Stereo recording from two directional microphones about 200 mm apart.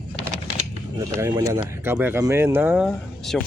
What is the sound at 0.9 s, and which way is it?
Speech, 15° right (ahead or behind).